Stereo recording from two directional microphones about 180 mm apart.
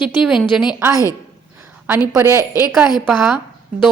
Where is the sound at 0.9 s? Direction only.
15° left (ahead or behind).